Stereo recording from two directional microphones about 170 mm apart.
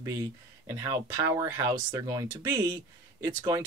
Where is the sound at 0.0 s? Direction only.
15° right (ahead or behind).